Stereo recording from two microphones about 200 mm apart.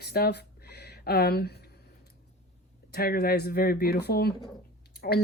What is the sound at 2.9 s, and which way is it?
Speech, 50° left (ahead or behind).